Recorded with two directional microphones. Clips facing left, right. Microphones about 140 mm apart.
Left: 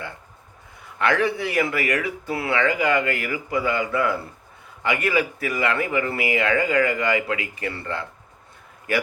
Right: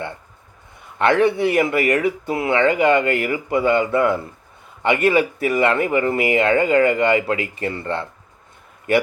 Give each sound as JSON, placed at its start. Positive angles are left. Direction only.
{"t": 0.9, "sound": "speech", "side_deg": -25}